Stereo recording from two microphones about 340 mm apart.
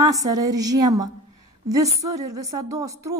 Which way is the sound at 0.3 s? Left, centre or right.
Centre.